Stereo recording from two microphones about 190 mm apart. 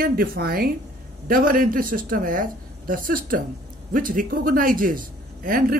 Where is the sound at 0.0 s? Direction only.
50° right (ahead or behind).